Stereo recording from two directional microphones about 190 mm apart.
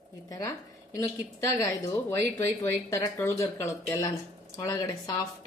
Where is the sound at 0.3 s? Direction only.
15° left (ahead or behind).